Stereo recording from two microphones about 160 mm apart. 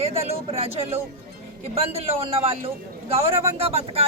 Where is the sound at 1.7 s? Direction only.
40° right (ahead or behind).